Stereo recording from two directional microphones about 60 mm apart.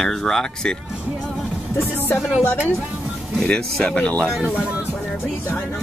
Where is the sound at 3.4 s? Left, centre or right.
Centre.